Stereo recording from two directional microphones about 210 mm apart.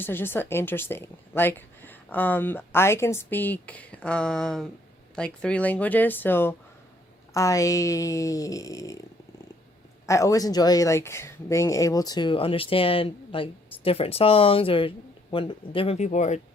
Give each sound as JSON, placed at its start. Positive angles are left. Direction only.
{"t": 0.0, "sound": "a woman's voice", "side_deg": 10}
{"t": 10.1, "sound": "speech", "side_deg": 15}